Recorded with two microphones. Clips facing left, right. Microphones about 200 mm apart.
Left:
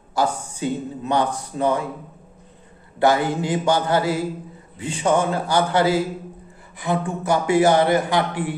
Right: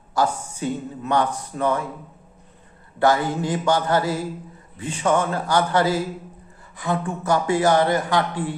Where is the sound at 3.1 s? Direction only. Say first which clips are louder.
Left 1 dB; 15° left (ahead or behind).